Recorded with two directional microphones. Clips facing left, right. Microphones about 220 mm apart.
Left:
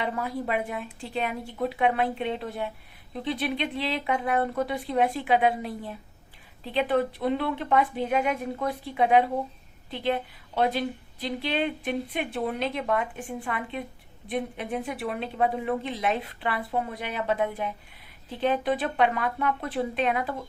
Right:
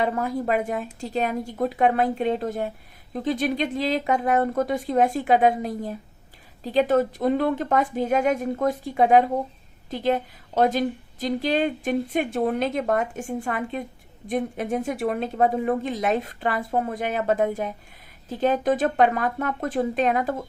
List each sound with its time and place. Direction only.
0.0 s a woman's voice: 45° right (ahead or behind)